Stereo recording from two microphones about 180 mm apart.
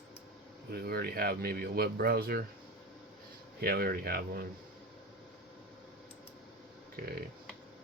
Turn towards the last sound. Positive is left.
turn(degrees=-55)  # may be behind; listen again after turning